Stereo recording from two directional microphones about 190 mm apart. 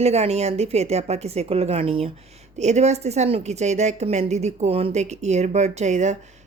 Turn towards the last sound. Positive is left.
turn(degrees=-35)  # may be behind; listen again after turning